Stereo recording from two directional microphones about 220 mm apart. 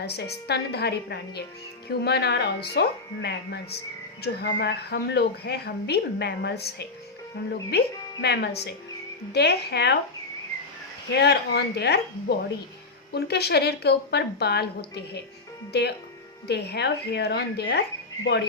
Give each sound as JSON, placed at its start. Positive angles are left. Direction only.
{"t": 0.0, "sound": "a woman's voice", "side_deg": 50}
{"t": 11.1, "sound": "a woman's voice", "side_deg": 50}
{"t": 13.1, "sound": "a woman's voice", "side_deg": 45}